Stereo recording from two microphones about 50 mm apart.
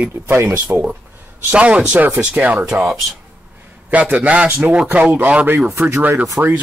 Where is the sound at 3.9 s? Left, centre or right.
Right.